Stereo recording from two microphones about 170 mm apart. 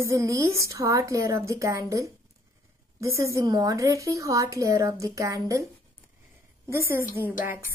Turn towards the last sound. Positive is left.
turn(degrees=-15)  # may be behind; listen again after turning